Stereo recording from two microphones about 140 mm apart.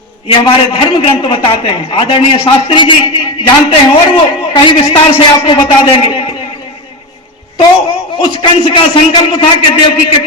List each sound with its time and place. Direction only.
0.3 s a man's voice: 40° left (ahead or behind)
8.2 s a man's voice: 35° left (ahead or behind)